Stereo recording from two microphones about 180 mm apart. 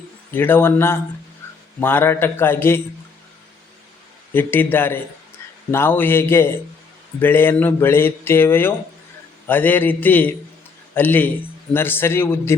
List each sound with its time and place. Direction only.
0.3 s speech: 10° left (ahead or behind)
4.4 s speech: 10° left (ahead or behind)